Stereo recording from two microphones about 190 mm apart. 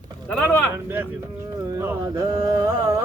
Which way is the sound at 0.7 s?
10° right (ahead or behind).